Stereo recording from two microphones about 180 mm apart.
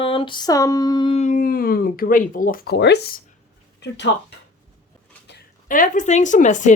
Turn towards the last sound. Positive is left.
turn(degrees=45)  # may be behind; listen again after turning